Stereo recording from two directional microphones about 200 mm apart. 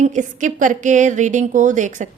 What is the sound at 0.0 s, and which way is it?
Speech, 40° right (ahead or behind).